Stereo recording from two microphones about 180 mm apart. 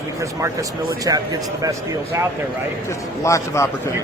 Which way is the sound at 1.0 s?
20° right (ahead or behind).